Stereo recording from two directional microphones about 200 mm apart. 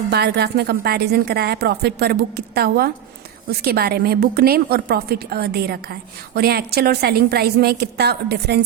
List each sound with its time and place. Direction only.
0.1 s a woman's voice: 55° right (ahead or behind)